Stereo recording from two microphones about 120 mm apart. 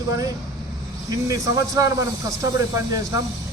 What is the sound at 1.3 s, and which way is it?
Speech, 25° right (ahead or behind).